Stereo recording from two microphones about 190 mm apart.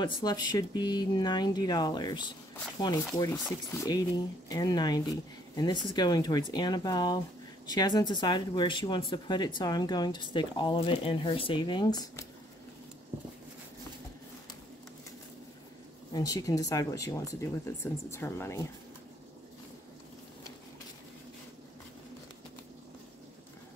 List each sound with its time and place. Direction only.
0.0 s speech: 20° left (ahead or behind)
16.1 s speech: 20° left (ahead or behind)